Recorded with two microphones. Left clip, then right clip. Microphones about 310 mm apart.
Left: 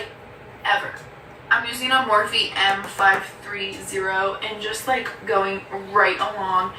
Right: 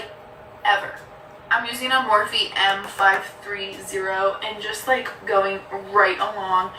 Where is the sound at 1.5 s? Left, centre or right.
Centre.